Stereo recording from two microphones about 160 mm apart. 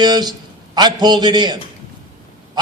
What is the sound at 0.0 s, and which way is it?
A man's voice, 25° right (ahead or behind).